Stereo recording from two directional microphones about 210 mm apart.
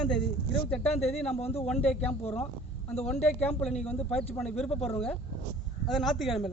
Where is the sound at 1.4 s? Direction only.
30° left (ahead or behind).